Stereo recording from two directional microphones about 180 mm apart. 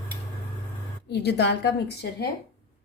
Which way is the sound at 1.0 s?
70° left (ahead or behind).